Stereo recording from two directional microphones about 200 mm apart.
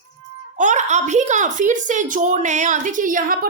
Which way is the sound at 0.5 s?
40° right (ahead or behind).